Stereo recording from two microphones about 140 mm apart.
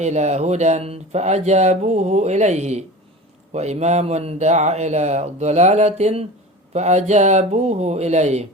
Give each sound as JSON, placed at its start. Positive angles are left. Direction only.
{"t": 0.0, "sound": "speech", "side_deg": -55}